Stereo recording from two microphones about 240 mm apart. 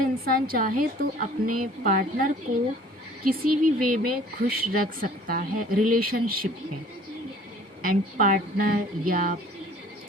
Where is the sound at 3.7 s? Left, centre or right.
Right.